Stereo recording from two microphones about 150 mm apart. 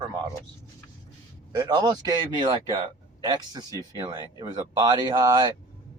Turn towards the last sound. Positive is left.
turn(degrees=-30)  # may be behind; listen again after turning